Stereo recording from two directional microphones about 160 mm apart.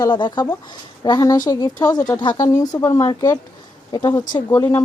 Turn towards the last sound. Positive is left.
turn(degrees=20)  # may be behind; listen again after turning